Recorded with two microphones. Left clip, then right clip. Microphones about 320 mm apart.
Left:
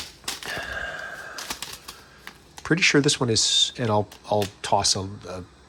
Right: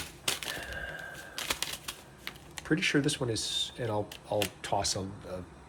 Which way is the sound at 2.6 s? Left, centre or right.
Centre.